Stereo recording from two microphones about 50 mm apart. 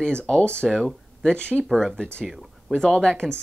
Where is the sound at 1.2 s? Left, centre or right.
Centre.